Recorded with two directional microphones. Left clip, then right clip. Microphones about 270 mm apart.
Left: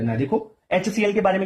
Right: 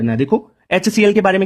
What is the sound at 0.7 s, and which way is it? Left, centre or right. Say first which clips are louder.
Speech: right 8 dB; right.